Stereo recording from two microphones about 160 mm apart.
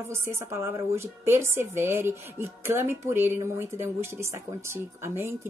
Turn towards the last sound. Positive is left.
turn(degrees=-15)  # may be behind; listen again after turning